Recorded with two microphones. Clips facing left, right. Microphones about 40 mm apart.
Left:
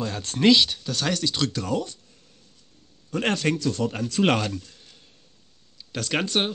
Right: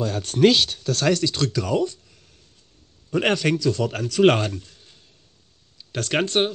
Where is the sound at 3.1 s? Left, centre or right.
Right.